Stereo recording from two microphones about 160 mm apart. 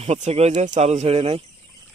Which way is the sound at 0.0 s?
45° right (ahead or behind).